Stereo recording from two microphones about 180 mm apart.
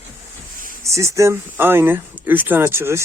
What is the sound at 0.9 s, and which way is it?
Speech, 15° right (ahead or behind).